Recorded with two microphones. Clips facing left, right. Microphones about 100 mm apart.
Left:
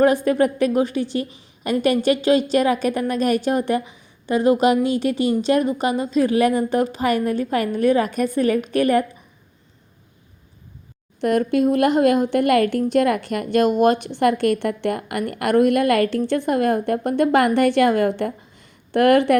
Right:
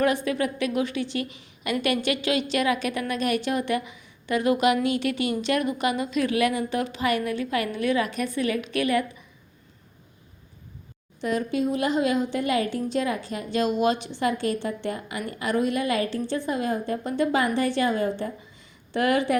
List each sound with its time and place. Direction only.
0.0 s a woman's voice: 40° left (ahead or behind)
11.2 s a woman's voice: 60° left (ahead or behind)